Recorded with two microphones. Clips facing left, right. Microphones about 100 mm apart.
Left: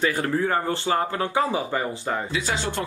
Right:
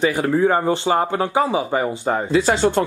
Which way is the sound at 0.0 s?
15° right (ahead or behind).